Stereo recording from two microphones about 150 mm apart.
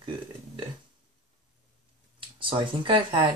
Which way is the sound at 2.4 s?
35° right (ahead or behind).